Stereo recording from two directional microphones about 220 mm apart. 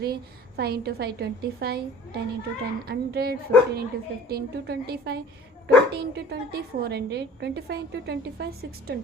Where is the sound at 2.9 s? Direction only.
45° right (ahead or behind).